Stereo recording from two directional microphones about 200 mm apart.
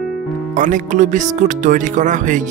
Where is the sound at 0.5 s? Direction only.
40° right (ahead or behind).